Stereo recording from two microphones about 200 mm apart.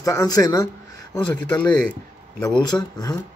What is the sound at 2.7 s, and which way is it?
Speech, 20° left (ahead or behind).